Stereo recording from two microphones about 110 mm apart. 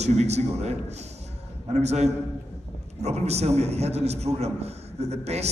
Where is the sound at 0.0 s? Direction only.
85° right.